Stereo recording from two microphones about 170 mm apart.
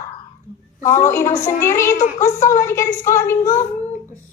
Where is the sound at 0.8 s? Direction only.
45° left (ahead or behind).